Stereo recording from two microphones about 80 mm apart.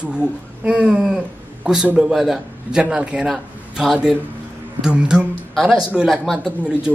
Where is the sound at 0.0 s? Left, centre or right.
Centre.